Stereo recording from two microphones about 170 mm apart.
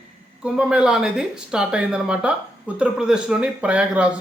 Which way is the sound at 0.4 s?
5° right (ahead or behind).